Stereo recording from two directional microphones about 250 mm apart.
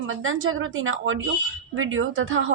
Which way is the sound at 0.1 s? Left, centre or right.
Right.